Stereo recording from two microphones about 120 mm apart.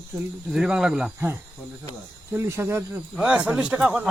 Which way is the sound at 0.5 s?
5° right (ahead or behind).